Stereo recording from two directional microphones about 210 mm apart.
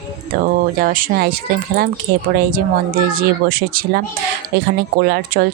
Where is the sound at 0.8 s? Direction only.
45° right (ahead or behind).